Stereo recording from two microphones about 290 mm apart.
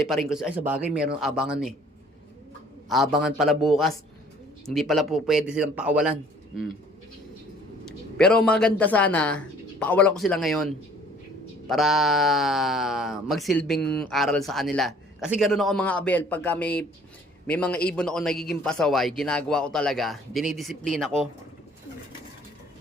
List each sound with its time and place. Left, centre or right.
0.0 s speech: centre
2.9 s speech: centre
8.2 s speech: centre
11.7 s a man's voice: centre